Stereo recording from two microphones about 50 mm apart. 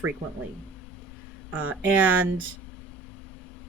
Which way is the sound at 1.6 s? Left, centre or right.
Right.